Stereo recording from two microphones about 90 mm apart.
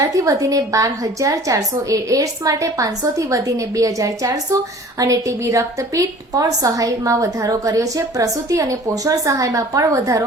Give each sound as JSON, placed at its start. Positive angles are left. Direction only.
{"t": 0.0, "sound": "a woman's voice", "side_deg": -40}